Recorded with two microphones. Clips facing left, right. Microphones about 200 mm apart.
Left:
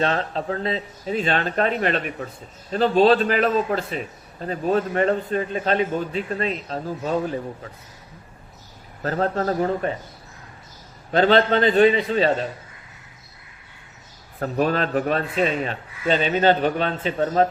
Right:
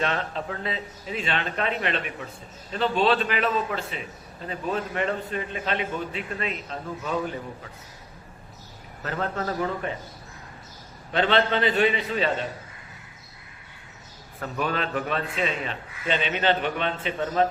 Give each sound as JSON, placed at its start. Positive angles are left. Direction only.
{"t": 0.0, "sound": "a man's voice", "side_deg": 35}
{"t": 9.0, "sound": "a man's voice", "side_deg": 35}
{"t": 11.1, "sound": "a man's voice", "side_deg": 40}
{"t": 14.3, "sound": "a man's voice", "side_deg": 40}